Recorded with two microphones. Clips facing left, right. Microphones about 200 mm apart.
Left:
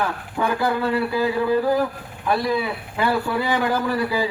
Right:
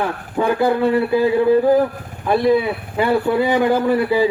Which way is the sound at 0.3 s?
20° right (ahead or behind).